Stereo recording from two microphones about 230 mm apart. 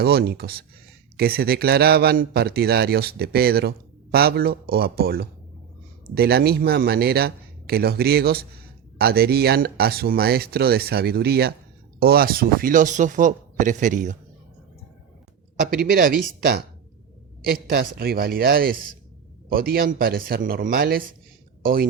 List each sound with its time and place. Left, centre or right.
0.0 s a man's voice: right
15.7 s speech: right